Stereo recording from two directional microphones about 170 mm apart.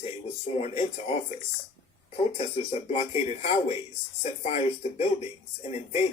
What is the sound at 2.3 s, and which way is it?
Speech, 35° left (ahead or behind).